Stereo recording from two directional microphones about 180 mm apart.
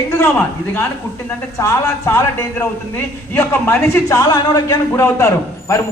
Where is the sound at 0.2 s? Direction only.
10° left (ahead or behind).